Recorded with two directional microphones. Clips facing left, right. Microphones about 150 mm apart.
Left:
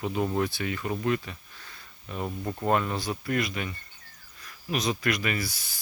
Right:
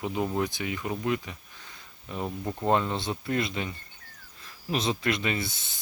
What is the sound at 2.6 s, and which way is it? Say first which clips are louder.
Speech: right 1 dB; 25° right (ahead or behind).